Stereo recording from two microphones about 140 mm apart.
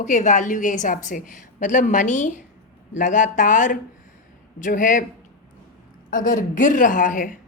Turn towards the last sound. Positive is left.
turn(degrees=70)  # may be behind; listen again after turning